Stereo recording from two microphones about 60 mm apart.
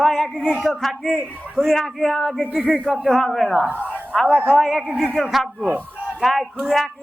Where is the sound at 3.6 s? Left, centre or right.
Right.